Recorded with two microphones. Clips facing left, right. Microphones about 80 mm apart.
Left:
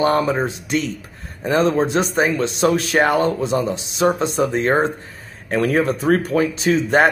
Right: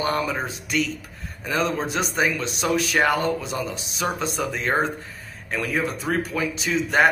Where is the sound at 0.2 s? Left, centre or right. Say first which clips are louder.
Left 7 dB; left.